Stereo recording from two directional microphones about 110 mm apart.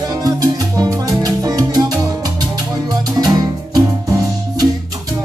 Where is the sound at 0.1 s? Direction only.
35° right (ahead or behind).